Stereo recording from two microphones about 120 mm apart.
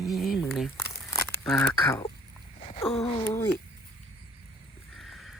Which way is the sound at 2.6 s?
65° left (ahead or behind).